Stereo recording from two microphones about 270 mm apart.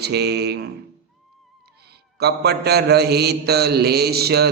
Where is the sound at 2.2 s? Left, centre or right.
Right.